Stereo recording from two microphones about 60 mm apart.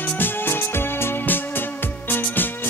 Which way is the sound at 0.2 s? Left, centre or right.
Left.